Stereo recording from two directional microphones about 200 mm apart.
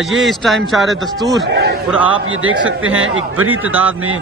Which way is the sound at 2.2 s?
90° right.